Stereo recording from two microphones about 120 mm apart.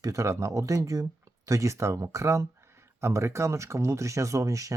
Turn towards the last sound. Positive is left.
turn(degrees=-25)  # may be behind; listen again after turning